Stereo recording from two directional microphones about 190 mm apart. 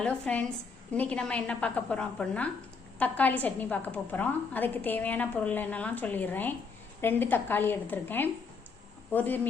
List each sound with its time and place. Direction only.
0.0 s a woman's voice: 5° left (ahead or behind)